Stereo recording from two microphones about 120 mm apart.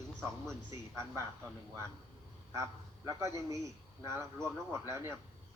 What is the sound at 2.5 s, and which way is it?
A man's voice, 25° right (ahead or behind).